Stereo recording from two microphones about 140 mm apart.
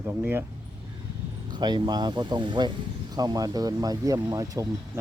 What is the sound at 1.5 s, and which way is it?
Speech, 30° right (ahead or behind).